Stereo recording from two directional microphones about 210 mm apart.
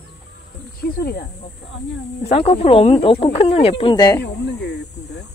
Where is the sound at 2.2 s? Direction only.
30° left (ahead or behind).